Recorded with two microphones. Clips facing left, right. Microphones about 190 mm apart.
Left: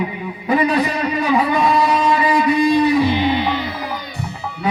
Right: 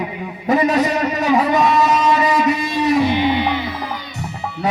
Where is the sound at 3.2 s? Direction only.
15° right (ahead or behind).